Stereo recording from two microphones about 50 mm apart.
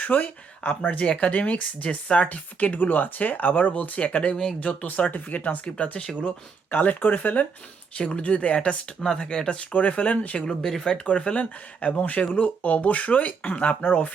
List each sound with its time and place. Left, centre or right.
0.0 s speech: left
6.7 s speech: left
7.9 s speech: left
9.0 s speech: centre
9.6 s speech: left
10.4 s speech: centre
11.0 s speech: left